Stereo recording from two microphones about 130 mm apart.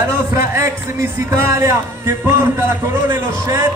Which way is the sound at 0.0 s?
20° right (ahead or behind).